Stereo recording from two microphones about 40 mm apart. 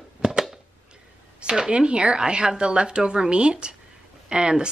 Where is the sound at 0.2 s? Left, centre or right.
Centre.